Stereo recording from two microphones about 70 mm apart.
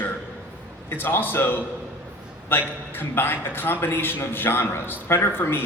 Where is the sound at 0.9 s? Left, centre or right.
Left.